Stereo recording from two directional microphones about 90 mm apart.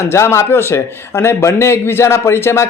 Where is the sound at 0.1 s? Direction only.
30° left (ahead or behind).